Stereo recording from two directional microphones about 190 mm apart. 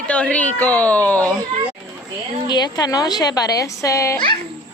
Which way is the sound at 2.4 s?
20° left (ahead or behind).